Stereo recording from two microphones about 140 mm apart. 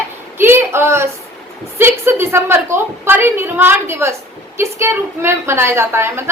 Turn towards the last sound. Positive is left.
turn(degrees=-20)  # may be behind; listen again after turning